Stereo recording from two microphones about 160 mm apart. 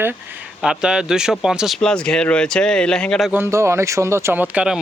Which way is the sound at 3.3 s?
15° right (ahead or behind).